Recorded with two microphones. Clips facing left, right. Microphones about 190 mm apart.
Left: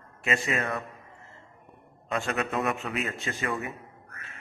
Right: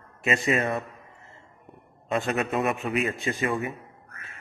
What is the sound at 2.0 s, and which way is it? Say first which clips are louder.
A man's voice: right 3 dB; 20° right (ahead or behind).